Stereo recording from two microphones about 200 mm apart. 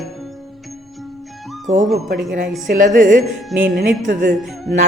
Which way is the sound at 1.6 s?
40° right (ahead or behind).